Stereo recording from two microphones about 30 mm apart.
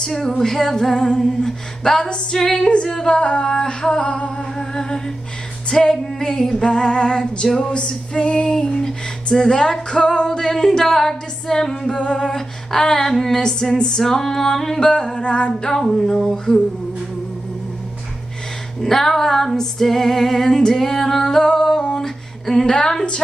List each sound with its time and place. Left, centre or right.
0.1 s music: centre
0.9 s female singing: left
2.3 s music: centre
2.9 s female singing: left
8.5 s female singing: left
13.0 s music: centre
13.4 s female singing: left
14.0 s female singing: centre; by 15.5 s left
16.0 s music: centre
16.5 s music: centre
18.8 s music: centre
21.9 s a sound: centre
22.7 s female singing: left